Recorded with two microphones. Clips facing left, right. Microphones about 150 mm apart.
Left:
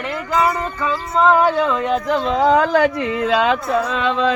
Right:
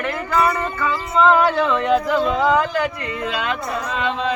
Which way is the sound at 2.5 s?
90° left.